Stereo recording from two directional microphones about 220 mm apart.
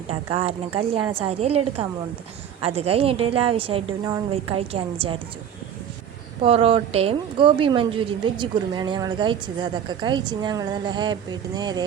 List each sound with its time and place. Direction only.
0.1 s a woman's voice: 25° right (ahead or behind)
6.4 s a woman's voice: 25° right (ahead or behind)